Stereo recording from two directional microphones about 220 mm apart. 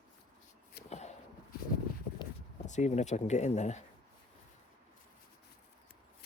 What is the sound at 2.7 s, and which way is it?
Speech, 30° left (ahead or behind).